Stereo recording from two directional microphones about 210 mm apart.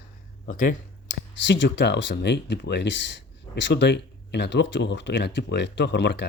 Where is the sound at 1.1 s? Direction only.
60° left (ahead or behind).